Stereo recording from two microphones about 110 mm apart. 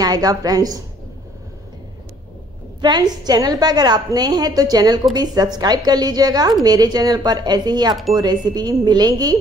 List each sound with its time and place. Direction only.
0.0 s a woman's voice: 35° right (ahead or behind)
2.8 s a woman's voice: 40° right (ahead or behind)